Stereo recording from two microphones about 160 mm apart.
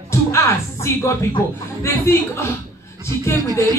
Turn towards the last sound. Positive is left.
turn(degrees=15)  # may be behind; listen again after turning